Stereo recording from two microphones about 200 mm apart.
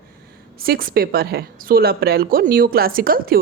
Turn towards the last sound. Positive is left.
turn(degrees=-45)  # may be behind; listen again after turning